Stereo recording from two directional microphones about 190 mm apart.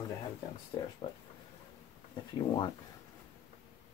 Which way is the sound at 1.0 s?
30° left (ahead or behind).